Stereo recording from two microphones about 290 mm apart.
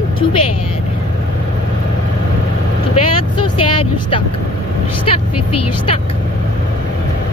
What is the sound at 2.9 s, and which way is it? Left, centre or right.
Speech, left.